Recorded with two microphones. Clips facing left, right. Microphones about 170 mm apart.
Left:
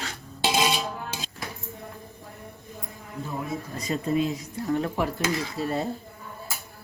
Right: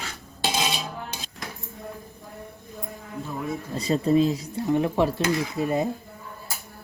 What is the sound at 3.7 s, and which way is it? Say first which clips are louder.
Speech: right 6 dB; 35° right (ahead or behind).